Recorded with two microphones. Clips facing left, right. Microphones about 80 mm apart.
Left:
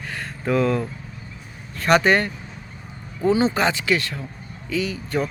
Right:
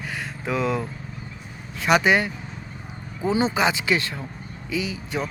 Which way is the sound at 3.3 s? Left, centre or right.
Right.